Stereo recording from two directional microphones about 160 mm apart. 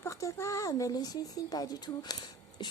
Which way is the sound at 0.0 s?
20° left (ahead or behind).